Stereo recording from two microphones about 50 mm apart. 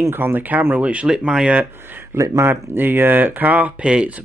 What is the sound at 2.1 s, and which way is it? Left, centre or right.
Speech, right.